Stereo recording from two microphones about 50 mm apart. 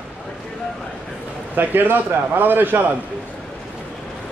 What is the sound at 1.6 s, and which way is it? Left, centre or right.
A man's voice, right.